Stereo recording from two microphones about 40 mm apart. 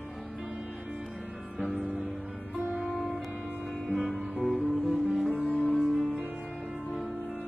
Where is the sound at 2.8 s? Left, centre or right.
Centre.